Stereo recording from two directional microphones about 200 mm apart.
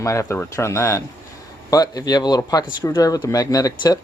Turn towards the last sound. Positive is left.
turn(degrees=20)  # may be behind; listen again after turning